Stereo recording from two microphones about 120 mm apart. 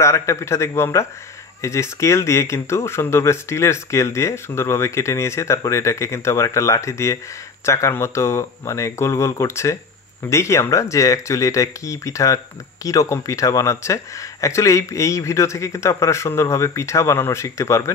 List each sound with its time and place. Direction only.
0.0 s speech: 25° left (ahead or behind)